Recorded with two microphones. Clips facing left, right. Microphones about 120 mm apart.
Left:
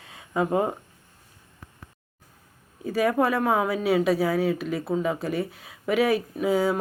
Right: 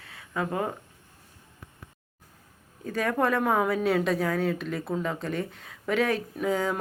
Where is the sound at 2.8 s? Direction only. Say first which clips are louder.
Left 3 dB; 10° left (ahead or behind).